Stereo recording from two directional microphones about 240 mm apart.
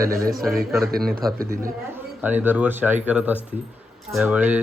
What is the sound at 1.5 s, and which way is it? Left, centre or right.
Speech, right.